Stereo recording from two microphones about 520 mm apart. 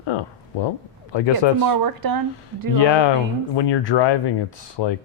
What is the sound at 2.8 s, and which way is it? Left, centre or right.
Speech, left.